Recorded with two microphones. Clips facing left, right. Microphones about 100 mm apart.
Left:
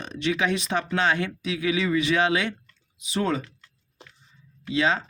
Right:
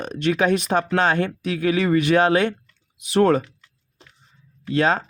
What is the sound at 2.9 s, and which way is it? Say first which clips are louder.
Speech: right 9 dB; 60° right (ahead or behind).